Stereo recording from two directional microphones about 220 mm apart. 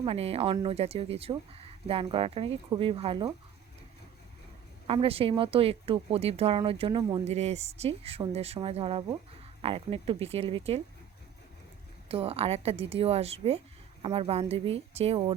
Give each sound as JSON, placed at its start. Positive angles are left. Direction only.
{"t": 0.0, "sound": "speech", "side_deg": -25}
{"t": 4.9, "sound": "speech", "side_deg": -25}
{"t": 12.0, "sound": "speech", "side_deg": -25}